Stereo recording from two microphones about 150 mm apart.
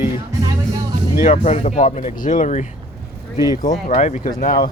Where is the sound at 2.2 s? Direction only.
60° left (ahead or behind).